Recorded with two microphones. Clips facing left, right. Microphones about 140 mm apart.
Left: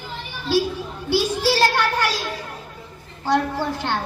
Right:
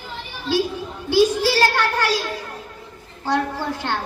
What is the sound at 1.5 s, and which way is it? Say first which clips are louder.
Speech: even; 15° left (ahead or behind).